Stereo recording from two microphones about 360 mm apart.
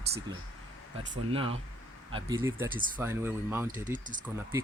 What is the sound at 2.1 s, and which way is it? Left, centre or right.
Speech, centre.